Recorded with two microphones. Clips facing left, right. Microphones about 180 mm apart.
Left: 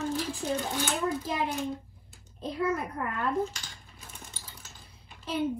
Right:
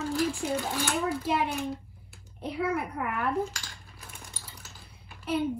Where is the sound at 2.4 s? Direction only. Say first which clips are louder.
Even; 10° right (ahead or behind).